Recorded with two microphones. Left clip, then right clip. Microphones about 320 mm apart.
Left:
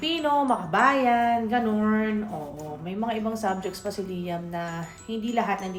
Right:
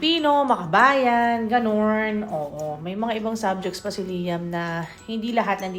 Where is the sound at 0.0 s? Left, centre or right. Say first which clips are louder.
Right 4 dB; right.